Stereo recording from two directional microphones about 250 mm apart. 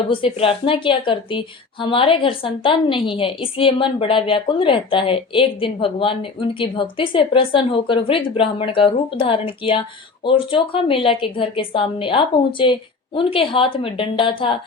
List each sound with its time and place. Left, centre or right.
0.1 s a woman's voice: left